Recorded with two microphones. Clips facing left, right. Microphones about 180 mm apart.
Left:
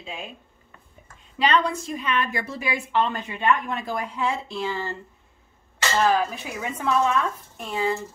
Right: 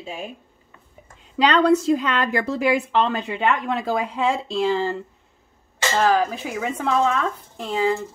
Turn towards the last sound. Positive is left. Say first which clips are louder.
# right 4 dB
turn(degrees=-90)